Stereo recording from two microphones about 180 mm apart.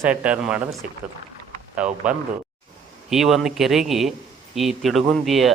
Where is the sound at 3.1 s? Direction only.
Centre (ahead or behind).